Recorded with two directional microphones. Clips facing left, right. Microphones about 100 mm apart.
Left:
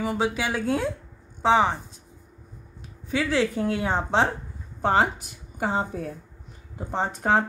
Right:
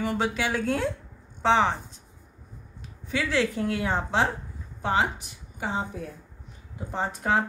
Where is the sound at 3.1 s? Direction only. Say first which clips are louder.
Left 2 dB; 20° left (ahead or behind).